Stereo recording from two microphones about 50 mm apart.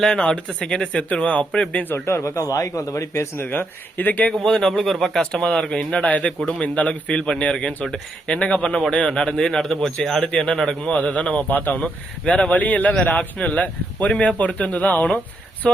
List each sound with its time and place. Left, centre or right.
0.0 s speech: centre
1.7 s speech: left
2.0 s speech: left
3.1 s speech: left
3.4 s speech: left
4.4 s speech: centre
6.0 s speech: left; by 10.2 s centre
10.3 s speech: centre
10.9 s speech: left
11.5 s speech: left
15.6 s speech: centre